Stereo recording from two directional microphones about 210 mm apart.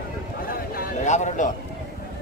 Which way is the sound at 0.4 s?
45° left (ahead or behind).